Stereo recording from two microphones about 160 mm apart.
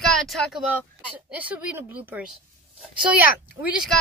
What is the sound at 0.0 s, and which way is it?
Speech, centre (ahead or behind).